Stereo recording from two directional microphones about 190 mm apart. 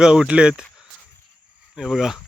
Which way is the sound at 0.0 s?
5° right (ahead or behind).